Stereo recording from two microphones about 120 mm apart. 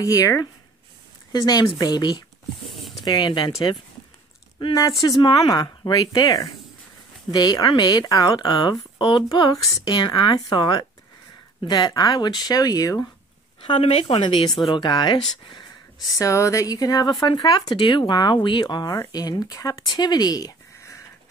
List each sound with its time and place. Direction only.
0.0 s speech: 30° left (ahead or behind)
2.7 s a sound: centre (ahead or behind)
3.1 s speech: 35° left (ahead or behind)
4.7 s speech: 30° left (ahead or behind)
13.7 s speech: 60° left (ahead or behind)
14.7 s speech: 35° left (ahead or behind)
16.2 s speech: 25° left (ahead or behind)